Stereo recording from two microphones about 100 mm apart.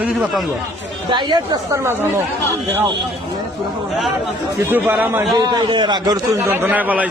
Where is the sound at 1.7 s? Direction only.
25° right (ahead or behind).